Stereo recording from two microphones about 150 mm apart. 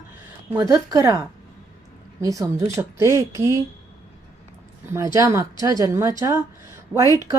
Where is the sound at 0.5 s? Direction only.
20° right (ahead or behind).